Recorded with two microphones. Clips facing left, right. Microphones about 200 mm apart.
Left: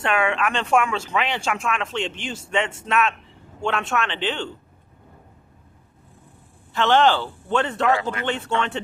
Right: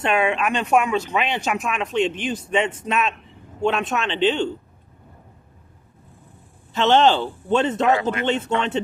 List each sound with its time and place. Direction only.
0.0 s speech: 20° right (ahead or behind)
6.7 s speech: 20° right (ahead or behind)